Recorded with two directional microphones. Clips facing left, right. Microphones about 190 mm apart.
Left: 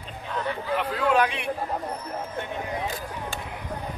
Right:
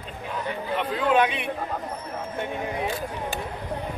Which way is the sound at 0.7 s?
Centre (ahead or behind).